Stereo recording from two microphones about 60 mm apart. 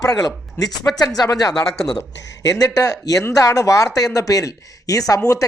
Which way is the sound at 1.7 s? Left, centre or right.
Centre.